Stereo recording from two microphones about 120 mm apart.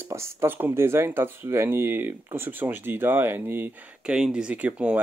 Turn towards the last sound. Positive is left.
turn(degrees=-10)  # may be behind; listen again after turning